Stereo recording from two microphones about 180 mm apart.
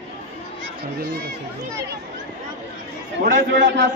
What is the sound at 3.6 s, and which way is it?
Speech, 85° right.